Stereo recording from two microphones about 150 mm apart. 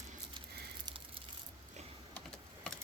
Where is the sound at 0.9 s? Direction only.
30° right (ahead or behind).